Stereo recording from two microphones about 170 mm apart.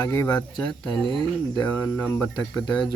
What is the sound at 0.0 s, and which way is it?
Speech, 15° left (ahead or behind).